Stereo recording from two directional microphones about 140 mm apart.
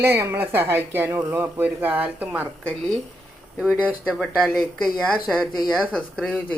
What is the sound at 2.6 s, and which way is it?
Speech, 5° left (ahead or behind).